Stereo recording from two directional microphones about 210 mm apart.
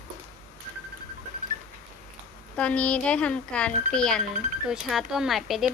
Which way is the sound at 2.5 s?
5° left (ahead or behind).